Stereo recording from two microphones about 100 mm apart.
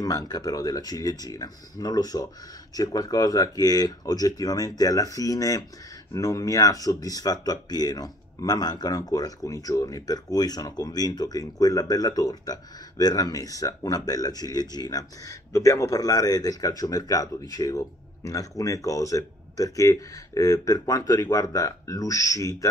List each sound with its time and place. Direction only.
0.0 s speech: 40° left (ahead or behind)